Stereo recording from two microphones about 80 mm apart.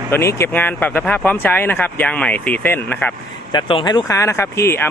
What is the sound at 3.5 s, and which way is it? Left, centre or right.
Speech, left.